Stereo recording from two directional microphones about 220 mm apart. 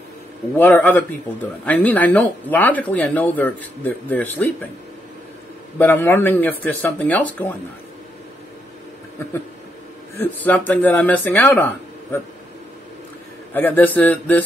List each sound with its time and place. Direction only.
0.6 s speech: 10° left (ahead or behind)
5.8 s speech: 10° left (ahead or behind)
10.1 s speech: 5° left (ahead or behind)
13.5 s speech: 10° left (ahead or behind)